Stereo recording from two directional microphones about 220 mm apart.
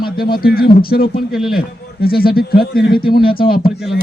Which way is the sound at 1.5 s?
45° left (ahead or behind).